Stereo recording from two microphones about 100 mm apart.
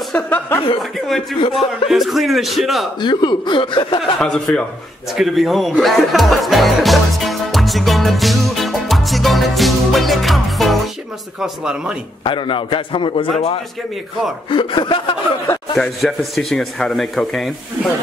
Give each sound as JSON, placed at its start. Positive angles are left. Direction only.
{"t": 0.1, "sound": "speech", "side_deg": 15}
{"t": 1.4, "sound": "a man's voice", "side_deg": 65}
{"t": 1.9, "sound": "speech", "side_deg": 0}
{"t": 3.0, "sound": "speech", "side_deg": 50}
{"t": 4.0, "sound": "speech", "side_deg": 5}
{"t": 12.2, "sound": "a man's voice", "side_deg": 55}
{"t": 14.5, "sound": "a man's voice", "side_deg": 55}
{"t": 15.7, "sound": "speech", "side_deg": 0}